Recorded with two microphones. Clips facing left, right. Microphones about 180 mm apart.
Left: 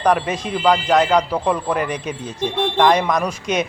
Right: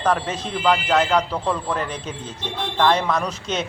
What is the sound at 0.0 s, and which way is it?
Speech, 15° left (ahead or behind).